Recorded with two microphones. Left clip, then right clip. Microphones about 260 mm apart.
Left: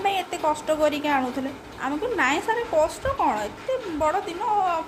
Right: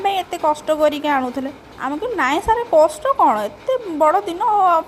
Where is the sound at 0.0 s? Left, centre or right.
Right.